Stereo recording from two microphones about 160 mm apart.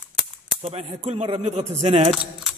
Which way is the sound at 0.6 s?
40° right (ahead or behind).